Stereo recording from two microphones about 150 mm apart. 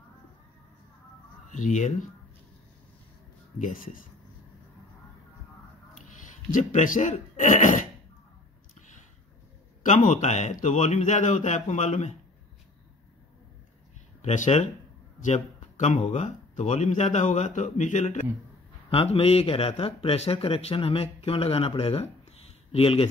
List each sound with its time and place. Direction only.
1.5 s speech: 55° left (ahead or behind)
3.5 s speech: 60° left (ahead or behind)
6.0 s speech: 60° left (ahead or behind)
9.8 s speech: 55° left (ahead or behind)
14.2 s speech: 50° left (ahead or behind)
18.9 s speech: 40° left (ahead or behind)